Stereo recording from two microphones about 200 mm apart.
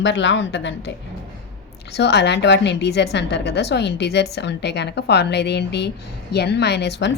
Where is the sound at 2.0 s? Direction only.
60° left (ahead or behind).